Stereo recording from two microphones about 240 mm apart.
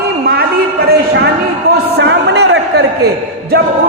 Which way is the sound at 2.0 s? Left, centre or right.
Right.